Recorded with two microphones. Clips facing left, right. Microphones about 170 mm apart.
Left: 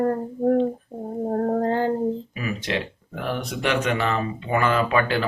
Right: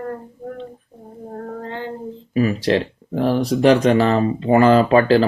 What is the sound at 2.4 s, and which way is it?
Speech, 35° right (ahead or behind).